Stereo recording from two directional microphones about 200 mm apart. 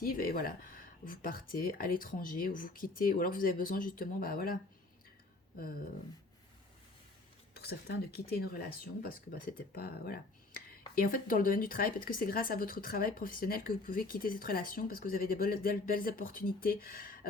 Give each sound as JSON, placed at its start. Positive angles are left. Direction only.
{"t": 0.0, "sound": "speech", "side_deg": 45}
{"t": 7.5, "sound": "speech", "side_deg": 55}